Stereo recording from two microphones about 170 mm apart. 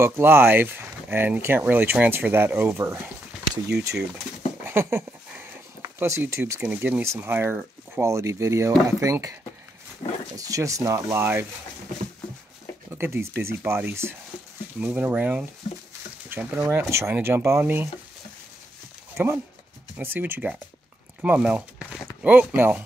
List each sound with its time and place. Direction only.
0.0 s speech: 15° right (ahead or behind)
4.6 s speech: 15° right (ahead or behind)
12.9 s speech: 15° right (ahead or behind)
19.1 s speech: 15° right (ahead or behind)